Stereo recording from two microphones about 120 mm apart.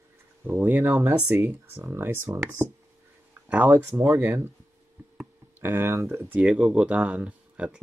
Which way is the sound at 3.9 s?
25° right (ahead or behind).